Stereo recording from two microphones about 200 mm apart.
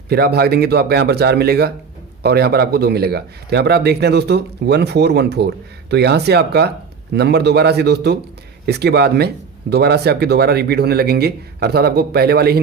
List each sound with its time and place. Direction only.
0.1 s speech: 50° right (ahead or behind)